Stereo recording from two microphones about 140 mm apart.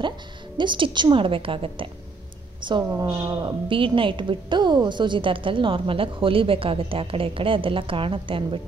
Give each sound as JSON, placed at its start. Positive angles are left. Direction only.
{"t": 0.6, "sound": "a woman's voice", "side_deg": -35}
{"t": 2.9, "sound": "a woman's voice", "side_deg": -25}